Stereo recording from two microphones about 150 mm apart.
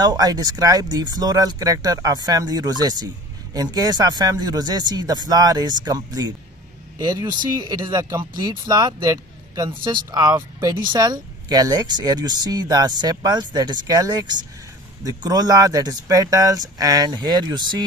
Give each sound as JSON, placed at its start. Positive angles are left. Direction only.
{"t": 0.0, "sound": "speech", "side_deg": -25}